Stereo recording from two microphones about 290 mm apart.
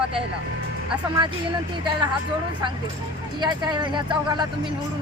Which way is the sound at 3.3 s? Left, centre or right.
Centre.